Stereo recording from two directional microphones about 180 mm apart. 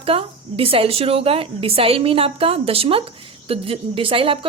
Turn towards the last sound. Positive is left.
turn(degrees=-30)  # may be behind; listen again after turning